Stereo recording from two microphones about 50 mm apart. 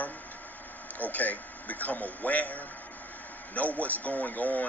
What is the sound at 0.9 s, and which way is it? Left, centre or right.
Speech, left.